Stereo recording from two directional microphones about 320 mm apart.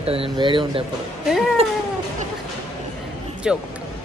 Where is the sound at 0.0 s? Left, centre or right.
Centre.